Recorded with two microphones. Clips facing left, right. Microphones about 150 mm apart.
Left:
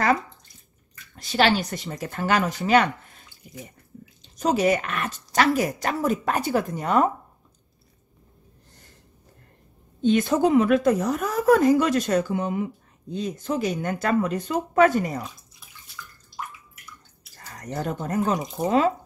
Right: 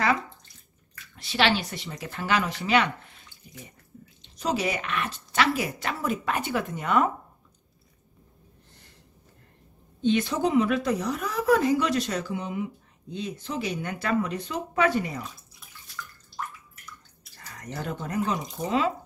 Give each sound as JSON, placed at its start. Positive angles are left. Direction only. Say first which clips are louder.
{"t": 1.1, "sound": "a woman's voice", "louder": "left 3 dB", "side_deg": 40}
{"t": 4.4, "sound": "a woman's voice", "louder": "left 6 dB", "side_deg": 45}
{"t": 10.0, "sound": "a woman's voice", "louder": "left 4 dB", "side_deg": 50}
{"t": 16.0, "sound": "bathtub", "louder": "right 2 dB", "side_deg": 10}
{"t": 17.6, "sound": "a woman's voice", "louder": "left 5 dB", "side_deg": 40}